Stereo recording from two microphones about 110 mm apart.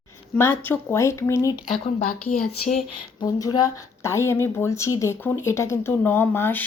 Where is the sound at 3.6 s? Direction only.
25° left (ahead or behind).